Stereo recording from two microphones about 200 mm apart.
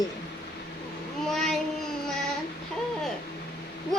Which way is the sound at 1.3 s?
Centre (ahead or behind).